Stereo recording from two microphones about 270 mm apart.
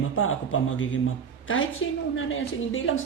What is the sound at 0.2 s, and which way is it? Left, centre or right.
Speech, left.